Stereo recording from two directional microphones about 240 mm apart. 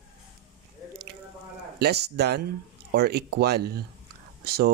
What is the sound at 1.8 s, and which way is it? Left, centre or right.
Speech, right.